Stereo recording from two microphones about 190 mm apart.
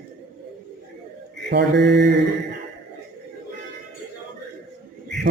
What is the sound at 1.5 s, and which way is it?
Mantra, 65° right (ahead or behind).